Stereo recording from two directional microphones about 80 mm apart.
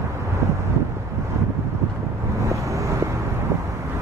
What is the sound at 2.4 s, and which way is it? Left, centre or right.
Vehicle, right.